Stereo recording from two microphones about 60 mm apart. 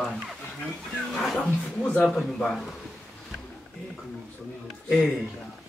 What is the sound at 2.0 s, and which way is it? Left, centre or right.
Speech, centre.